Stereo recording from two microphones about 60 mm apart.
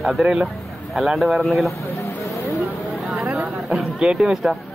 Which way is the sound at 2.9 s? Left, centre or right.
Centre.